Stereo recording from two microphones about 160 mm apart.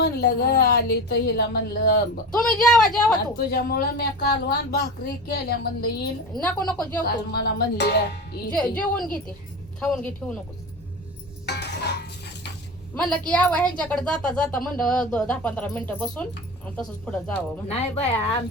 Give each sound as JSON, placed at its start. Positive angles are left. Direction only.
{"t": 0.0, "sound": "speech", "side_deg": 65}
{"t": 2.3, "sound": "speech", "side_deg": 5}
{"t": 3.3, "sound": "speech", "side_deg": 70}
{"t": 6.3, "sound": "speech", "side_deg": 5}
{"t": 7.3, "sound": "speech", "side_deg": 85}
{"t": 8.5, "sound": "speech", "side_deg": 5}
{"t": 11.4, "sound": "a sound", "side_deg": 90}
{"t": 13.0, "sound": "a woman's voice", "side_deg": 5}
{"t": 17.7, "sound": "speech", "side_deg": 40}